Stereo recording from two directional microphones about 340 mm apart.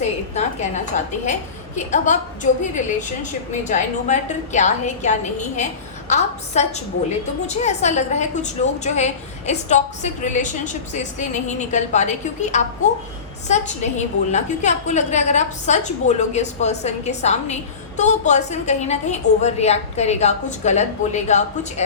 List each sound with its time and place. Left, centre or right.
0.0 s a woman's voice: centre
14.3 s a woman's voice: centre